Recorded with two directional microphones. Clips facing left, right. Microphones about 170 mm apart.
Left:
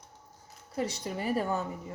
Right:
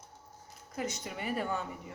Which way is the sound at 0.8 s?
35° left (ahead or behind).